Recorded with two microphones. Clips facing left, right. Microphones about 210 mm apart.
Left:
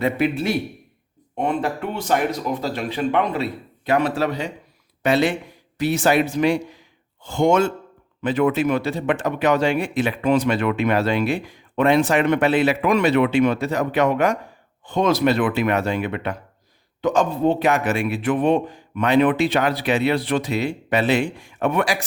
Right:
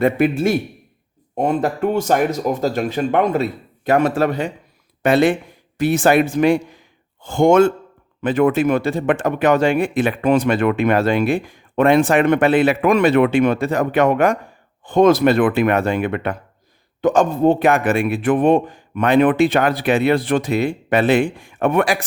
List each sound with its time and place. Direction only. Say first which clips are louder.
0.0 s a man's voice: right 5 dB; 50° right (ahead or behind)